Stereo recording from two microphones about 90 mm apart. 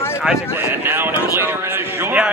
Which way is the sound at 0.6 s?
25° right (ahead or behind).